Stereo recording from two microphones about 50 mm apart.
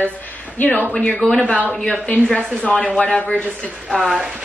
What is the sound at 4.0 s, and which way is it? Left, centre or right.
Speech, centre.